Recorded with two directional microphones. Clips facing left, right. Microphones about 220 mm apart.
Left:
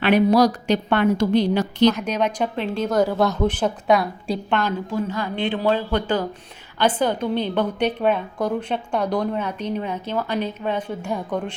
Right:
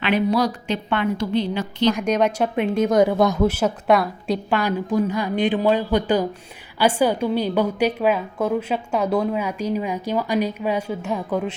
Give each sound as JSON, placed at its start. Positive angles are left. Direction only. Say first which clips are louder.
{"t": 0.1, "sound": "a woman's voice", "louder": "left 4 dB", "side_deg": 40}
{"t": 1.3, "sound": "a woman's voice", "louder": "left 4 dB", "side_deg": 75}
{"t": 2.1, "sound": "a woman's voice", "louder": "right 3 dB", "side_deg": -10}
{"t": 2.9, "sound": "a woman's voice", "louder": "right 1 dB", "side_deg": -15}